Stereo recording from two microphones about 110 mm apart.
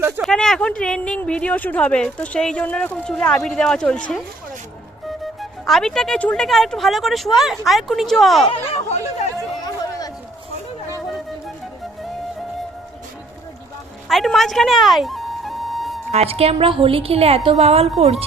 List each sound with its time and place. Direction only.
0.2 s speech: 5° left (ahead or behind)
5.2 s speech: centre (ahead or behind)
8.4 s speech: 70° left (ahead or behind)
14.1 s music: centre (ahead or behind)
16.1 s a woman's voice: 65° right (ahead or behind)